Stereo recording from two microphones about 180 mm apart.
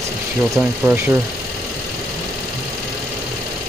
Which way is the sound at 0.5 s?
10° right (ahead or behind).